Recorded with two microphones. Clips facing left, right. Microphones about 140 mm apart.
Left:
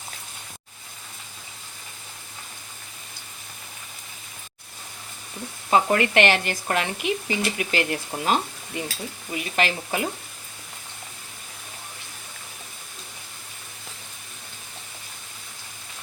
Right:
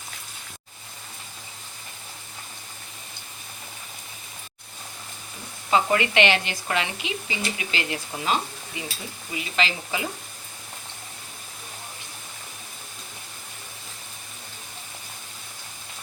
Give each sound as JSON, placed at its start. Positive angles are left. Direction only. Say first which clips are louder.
{"t": 5.7, "sound": "speech", "louder": "left 2 dB", "side_deg": 50}